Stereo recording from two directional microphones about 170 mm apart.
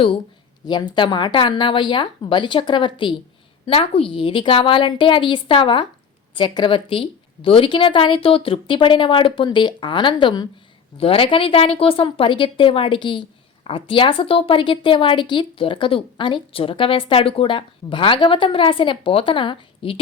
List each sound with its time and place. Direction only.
0.6 s a woman's voice: 25° left (ahead or behind)